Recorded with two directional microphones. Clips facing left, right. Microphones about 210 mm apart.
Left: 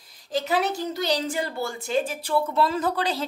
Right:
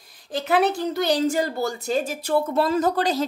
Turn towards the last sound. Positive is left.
turn(degrees=-45)  # may be behind; listen again after turning